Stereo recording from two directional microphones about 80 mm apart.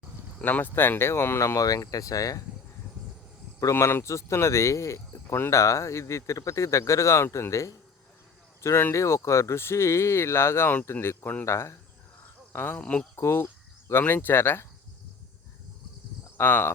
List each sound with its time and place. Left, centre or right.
0.4 s speech: left
3.6 s speech: left
16.4 s speech: left